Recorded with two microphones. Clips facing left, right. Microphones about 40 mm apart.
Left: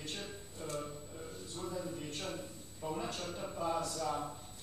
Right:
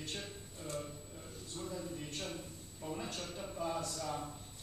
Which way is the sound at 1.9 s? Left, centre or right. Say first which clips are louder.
Left 2 dB; centre.